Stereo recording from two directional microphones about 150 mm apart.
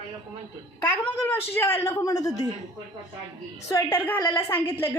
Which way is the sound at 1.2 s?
15° left (ahead or behind).